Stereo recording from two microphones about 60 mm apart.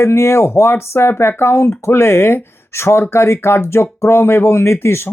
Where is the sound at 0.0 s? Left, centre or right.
Left.